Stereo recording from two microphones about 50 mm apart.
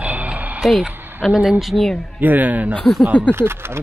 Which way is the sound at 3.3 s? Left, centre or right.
Right.